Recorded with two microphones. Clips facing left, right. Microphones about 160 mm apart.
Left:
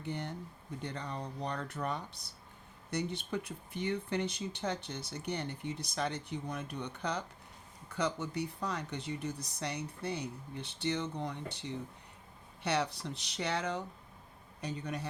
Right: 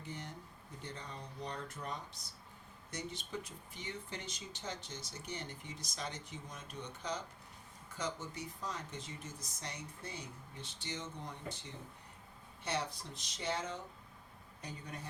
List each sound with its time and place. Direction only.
0.0 s speech: 65° left (ahead or behind)
12.6 s speech: 70° left (ahead or behind)